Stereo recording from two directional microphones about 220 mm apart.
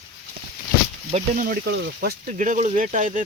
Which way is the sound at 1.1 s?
35° right (ahead or behind).